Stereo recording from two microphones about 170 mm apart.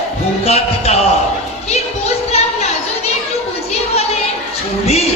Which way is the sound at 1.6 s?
40° left (ahead or behind).